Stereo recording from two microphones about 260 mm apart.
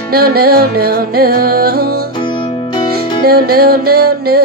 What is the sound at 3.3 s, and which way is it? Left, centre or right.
Music, right.